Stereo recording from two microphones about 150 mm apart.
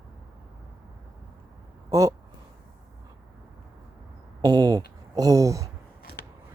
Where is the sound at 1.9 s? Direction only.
20° right (ahead or behind).